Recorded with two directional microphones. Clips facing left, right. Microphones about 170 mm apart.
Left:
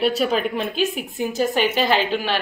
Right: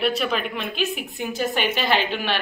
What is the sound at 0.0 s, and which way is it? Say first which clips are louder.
Speech: left 4 dB; 35° left (ahead or behind).